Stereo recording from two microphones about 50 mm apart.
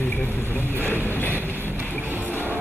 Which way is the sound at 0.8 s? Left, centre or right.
Left.